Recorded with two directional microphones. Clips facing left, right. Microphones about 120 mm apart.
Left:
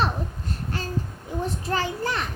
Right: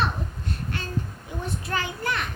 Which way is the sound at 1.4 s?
35° left (ahead or behind).